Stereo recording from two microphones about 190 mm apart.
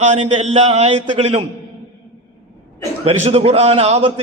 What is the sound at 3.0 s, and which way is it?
A man's voice, 35° right (ahead or behind).